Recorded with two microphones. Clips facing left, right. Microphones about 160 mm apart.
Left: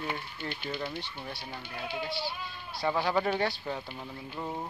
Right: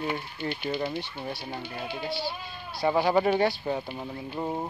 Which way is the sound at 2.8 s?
15° right (ahead or behind).